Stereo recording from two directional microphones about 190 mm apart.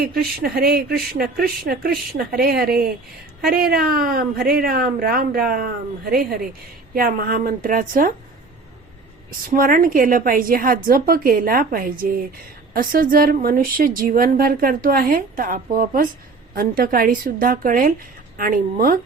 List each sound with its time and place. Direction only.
0.0 s a woman's voice: 55° right (ahead or behind)
9.5 s a woman's voice: 45° right (ahead or behind)